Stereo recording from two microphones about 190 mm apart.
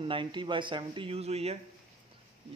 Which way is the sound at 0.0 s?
25° right (ahead or behind).